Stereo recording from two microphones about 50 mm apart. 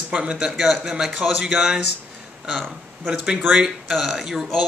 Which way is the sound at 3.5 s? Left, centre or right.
Centre.